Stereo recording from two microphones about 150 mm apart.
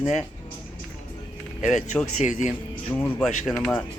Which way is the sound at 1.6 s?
55° left (ahead or behind).